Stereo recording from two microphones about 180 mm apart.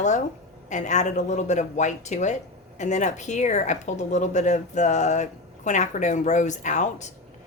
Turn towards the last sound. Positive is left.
turn(degrees=40)  # may be behind; listen again after turning